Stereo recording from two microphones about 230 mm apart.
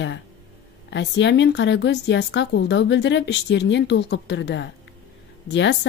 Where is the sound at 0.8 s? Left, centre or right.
Left.